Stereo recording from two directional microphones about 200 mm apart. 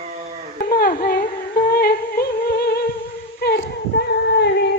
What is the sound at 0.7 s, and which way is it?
Music, 45° left (ahead or behind).